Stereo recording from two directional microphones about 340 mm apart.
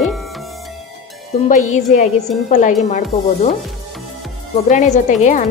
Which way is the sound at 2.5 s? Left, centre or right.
Left.